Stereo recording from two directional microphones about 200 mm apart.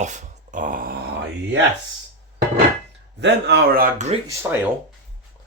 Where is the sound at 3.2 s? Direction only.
60° right (ahead or behind); by 4.2 s 35° right (ahead or behind).